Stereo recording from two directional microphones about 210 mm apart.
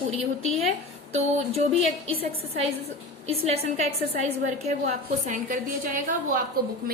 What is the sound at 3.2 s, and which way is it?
A woman's voice, 30° right (ahead or behind).